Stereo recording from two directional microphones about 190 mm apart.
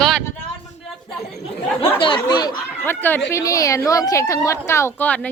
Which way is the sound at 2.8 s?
10° left (ahead or behind).